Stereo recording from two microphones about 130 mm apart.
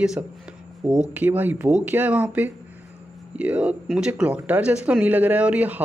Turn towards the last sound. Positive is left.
turn(degrees=-10)  # may be behind; listen again after turning